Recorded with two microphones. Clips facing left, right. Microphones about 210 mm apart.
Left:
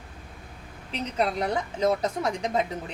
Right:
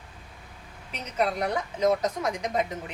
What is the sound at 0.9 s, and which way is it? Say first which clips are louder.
A woman's voice: left 1 dB; 30° left (ahead or behind).